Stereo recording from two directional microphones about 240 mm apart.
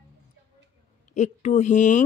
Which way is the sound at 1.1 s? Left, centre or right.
Left.